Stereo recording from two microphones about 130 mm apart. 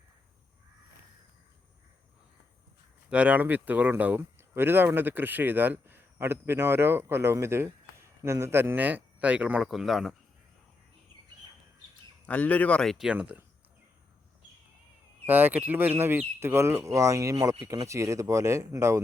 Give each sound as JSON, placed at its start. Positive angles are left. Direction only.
{"t": 3.1, "sound": "speech", "side_deg": -10}
{"t": 12.2, "sound": "a man's voice", "side_deg": 10}
{"t": 15.3, "sound": "speech", "side_deg": -15}